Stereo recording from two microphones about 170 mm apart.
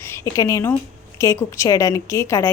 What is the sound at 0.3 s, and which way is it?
A woman's voice, 20° left (ahead or behind).